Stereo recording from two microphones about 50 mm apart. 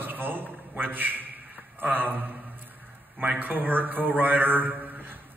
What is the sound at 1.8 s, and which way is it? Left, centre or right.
A man's voice, right.